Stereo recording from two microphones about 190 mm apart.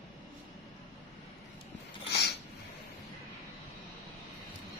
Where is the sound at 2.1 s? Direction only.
60° left (ahead or behind).